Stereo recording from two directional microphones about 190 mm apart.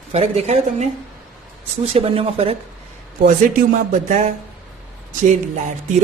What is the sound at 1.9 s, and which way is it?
Speech, 30° right (ahead or behind).